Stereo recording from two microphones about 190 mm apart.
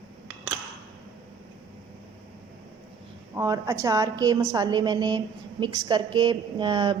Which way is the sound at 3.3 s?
15° right (ahead or behind).